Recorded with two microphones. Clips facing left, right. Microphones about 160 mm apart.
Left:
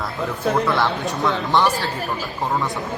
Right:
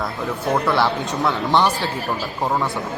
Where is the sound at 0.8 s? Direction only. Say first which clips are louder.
Right 1 dB; centre (ahead or behind).